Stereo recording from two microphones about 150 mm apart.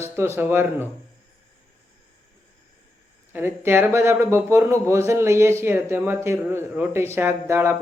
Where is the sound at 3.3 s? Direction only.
15° right (ahead or behind).